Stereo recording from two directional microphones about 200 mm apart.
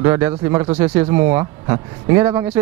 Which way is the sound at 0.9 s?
10° right (ahead or behind).